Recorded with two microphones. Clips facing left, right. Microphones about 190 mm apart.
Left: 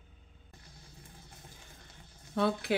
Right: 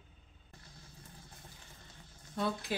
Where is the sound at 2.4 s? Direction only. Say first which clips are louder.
Left 6 dB; 80° left.